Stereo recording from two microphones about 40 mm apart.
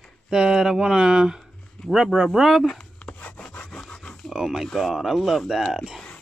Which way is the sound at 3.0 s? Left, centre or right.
Left.